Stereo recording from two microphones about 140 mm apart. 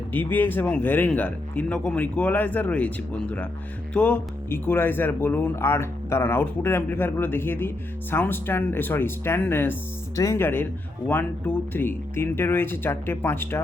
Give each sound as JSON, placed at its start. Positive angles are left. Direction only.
{"t": 0.1, "sound": "speech", "side_deg": 10}